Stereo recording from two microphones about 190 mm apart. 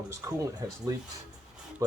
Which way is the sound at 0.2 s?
15° right (ahead or behind).